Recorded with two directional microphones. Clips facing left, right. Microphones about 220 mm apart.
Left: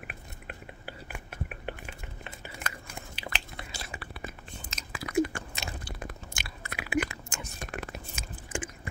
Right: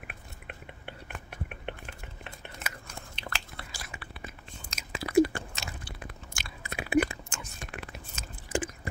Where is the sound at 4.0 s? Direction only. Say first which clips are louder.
Left 4 dB; 40° left (ahead or behind).